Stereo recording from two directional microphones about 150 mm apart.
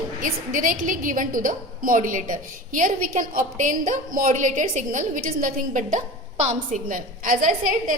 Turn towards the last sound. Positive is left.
turn(degrees=-65)  # may be behind; listen again after turning